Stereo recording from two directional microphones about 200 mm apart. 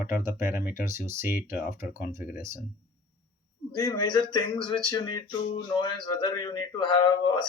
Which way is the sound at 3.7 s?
20° left (ahead or behind).